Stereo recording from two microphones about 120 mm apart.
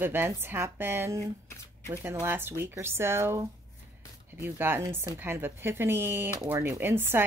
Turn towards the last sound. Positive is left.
turn(degrees=-20)  # may be behind; listen again after turning